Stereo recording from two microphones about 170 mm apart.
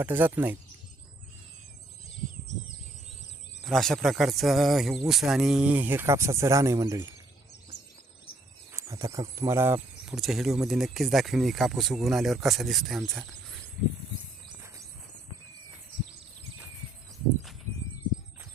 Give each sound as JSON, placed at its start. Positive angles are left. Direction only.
{"t": 0.0, "sound": "speech", "side_deg": -10}
{"t": 3.6, "sound": "speech", "side_deg": 0}
{"t": 8.7, "sound": "speech", "side_deg": -20}
{"t": 10.2, "sound": "speech", "side_deg": 0}